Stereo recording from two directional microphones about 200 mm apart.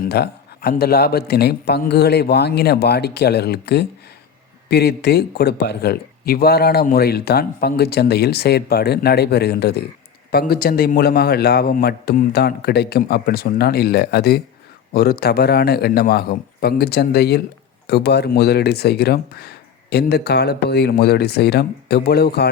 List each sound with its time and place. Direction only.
0.0 s speech: 50° left (ahead or behind)